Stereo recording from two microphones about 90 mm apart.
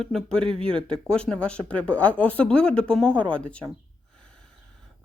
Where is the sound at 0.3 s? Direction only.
90° right.